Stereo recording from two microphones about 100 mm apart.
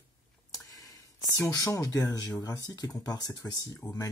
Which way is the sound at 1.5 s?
35° left (ahead or behind).